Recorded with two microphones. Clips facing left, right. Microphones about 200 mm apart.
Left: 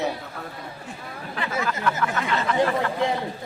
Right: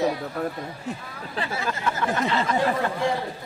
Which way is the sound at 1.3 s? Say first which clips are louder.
Left 1 dB; 30° right (ahead or behind).